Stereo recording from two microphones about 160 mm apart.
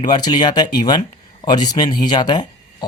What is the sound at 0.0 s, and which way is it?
Speech, 25° left (ahead or behind).